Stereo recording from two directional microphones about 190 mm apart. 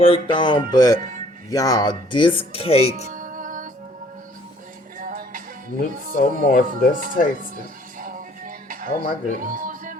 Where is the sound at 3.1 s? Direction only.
45° right (ahead or behind).